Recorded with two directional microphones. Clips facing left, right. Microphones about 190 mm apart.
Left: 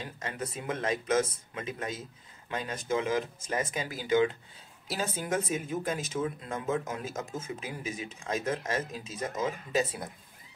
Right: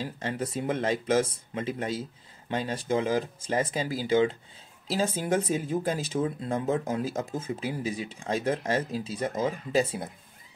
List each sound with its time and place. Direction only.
0.0 s speech: 30° right (ahead or behind)